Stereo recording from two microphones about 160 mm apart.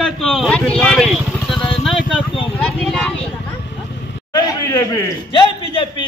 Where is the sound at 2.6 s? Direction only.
Centre (ahead or behind).